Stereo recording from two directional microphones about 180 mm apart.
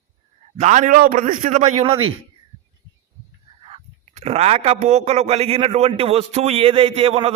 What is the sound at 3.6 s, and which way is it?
A man's voice, 35° right (ahead or behind).